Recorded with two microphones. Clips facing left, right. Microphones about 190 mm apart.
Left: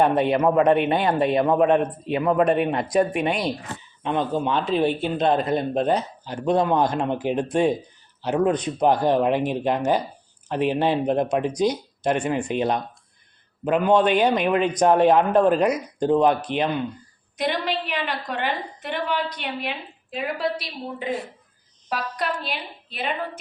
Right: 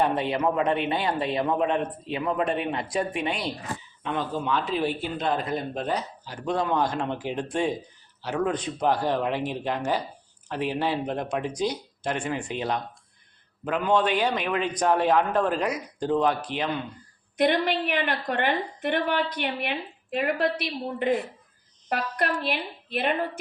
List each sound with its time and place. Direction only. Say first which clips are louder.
0.0 s a man's voice: left 5 dB; 55° left (ahead or behind)
4.0 s speech: left 6 dB; 20° left (ahead or behind)
17.3 s a woman's voice: right 2 dB; 55° right (ahead or behind)